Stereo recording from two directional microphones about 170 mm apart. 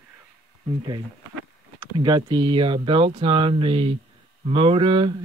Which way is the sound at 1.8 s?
25° right (ahead or behind).